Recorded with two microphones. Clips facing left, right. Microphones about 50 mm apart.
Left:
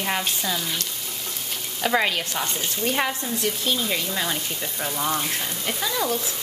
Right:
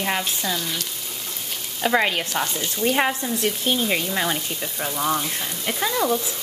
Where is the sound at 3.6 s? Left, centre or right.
Right.